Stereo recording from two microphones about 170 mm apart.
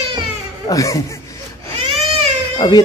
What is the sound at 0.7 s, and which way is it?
Speech, 20° left (ahead or behind).